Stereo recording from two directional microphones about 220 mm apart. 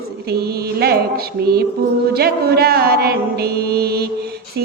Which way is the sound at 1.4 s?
45° right (ahead or behind).